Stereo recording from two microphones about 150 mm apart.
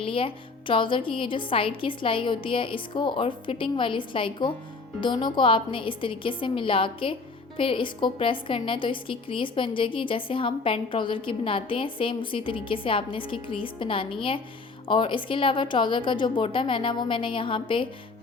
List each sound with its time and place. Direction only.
0.0 s a woman's voice: 35° left (ahead or behind)